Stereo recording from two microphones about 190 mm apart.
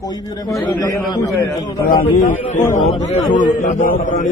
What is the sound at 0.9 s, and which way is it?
Speech, 20° left (ahead or behind).